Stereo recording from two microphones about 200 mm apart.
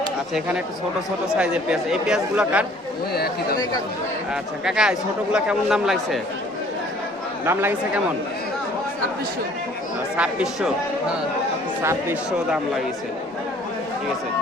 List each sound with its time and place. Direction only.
0.3 s speech: 5° right (ahead or behind)
3.1 s speech: 50° left (ahead or behind)
4.6 s speech: 5° right (ahead or behind)
7.4 s speech: 10° right (ahead or behind)
10.2 s speech: 5° right (ahead or behind)
11.8 s speech: 10° right (ahead or behind)